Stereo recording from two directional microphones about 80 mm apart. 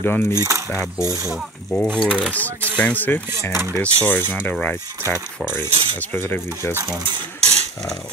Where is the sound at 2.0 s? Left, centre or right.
Centre.